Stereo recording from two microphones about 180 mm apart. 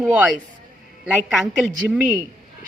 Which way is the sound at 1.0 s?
Centre (ahead or behind).